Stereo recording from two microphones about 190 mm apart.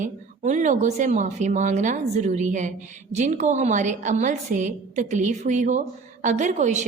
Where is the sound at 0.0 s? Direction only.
40° right (ahead or behind).